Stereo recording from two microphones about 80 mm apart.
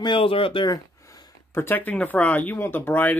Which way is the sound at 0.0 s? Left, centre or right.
Left.